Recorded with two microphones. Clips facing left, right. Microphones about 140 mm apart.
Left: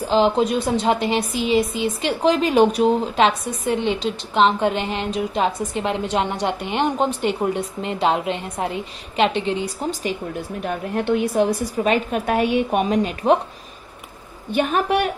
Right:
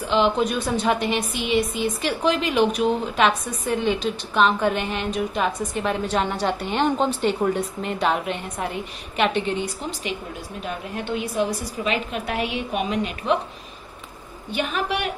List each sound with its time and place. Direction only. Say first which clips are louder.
0.0 s a woman's voice: left 3 dB; 35° left (ahead or behind)
10.6 s a woman's voice: left 6 dB; 55° left (ahead or behind)
14.5 s a woman's voice: left 6 dB; 50° left (ahead or behind)